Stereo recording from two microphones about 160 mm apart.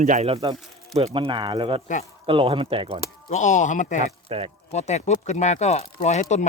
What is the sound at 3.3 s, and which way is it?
Speech, 50° left (ahead or behind).